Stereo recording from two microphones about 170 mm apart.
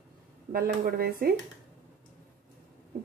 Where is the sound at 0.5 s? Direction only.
60° right (ahead or behind).